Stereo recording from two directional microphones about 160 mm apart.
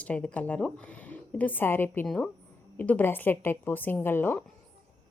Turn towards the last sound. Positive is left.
turn(degrees=15)  # may be behind; listen again after turning